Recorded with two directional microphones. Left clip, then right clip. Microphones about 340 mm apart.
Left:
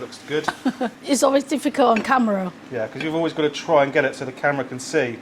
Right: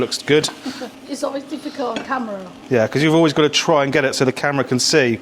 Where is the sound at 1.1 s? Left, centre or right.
Left.